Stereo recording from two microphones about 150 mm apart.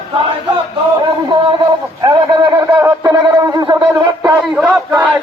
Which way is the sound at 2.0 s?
25° right (ahead or behind).